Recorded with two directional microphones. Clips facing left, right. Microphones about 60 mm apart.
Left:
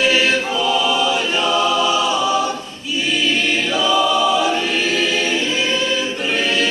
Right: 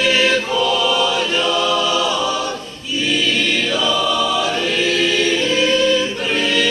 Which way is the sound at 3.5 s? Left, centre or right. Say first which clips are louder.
Left 1 dB; left.